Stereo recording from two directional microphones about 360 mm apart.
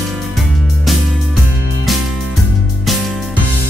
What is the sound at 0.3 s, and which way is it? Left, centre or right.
Music, centre.